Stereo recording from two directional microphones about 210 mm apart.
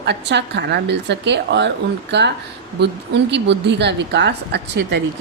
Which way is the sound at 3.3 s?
55° right (ahead or behind).